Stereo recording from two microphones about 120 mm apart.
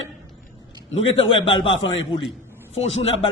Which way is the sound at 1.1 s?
45° left (ahead or behind).